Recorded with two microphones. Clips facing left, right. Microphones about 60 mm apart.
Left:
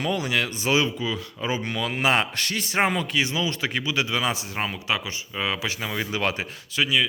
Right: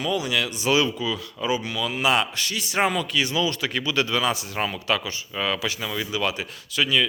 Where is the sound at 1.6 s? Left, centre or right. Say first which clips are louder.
Even; left.